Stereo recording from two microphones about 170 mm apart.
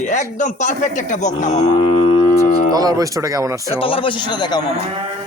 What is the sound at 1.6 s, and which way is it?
Livestock, 30° left (ahead or behind).